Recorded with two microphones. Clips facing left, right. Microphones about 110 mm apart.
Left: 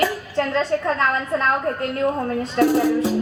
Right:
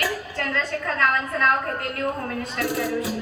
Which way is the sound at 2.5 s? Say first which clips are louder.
Left 10 dB; 25° left (ahead or behind).